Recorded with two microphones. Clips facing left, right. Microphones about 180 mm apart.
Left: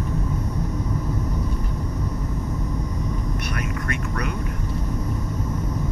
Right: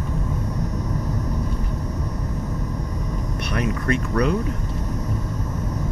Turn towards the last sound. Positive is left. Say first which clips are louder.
# right 7 dB
turn(degrees=-35)  # may be behind; listen again after turning